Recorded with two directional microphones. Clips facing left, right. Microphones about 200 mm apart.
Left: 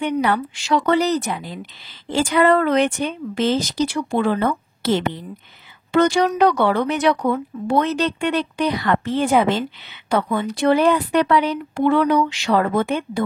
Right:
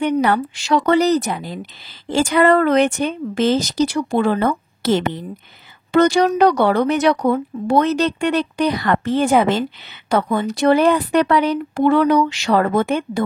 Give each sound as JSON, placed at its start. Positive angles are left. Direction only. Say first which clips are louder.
{"t": 0.0, "sound": "speech", "louder": "right 3 dB", "side_deg": -45}